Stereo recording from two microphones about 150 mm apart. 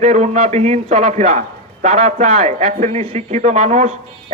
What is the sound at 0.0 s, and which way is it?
Speech, 50° right (ahead or behind).